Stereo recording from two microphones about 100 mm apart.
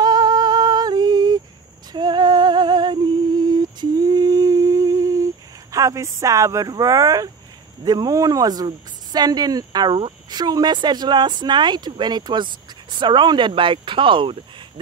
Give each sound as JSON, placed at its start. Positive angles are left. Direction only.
{"t": 0.0, "sound": "a sound", "side_deg": -45}
{"t": 1.9, "sound": "humming", "side_deg": -45}
{"t": 7.8, "sound": "speech", "side_deg": -40}